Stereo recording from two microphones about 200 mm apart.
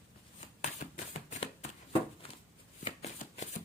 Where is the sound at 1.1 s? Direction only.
35° left (ahead or behind).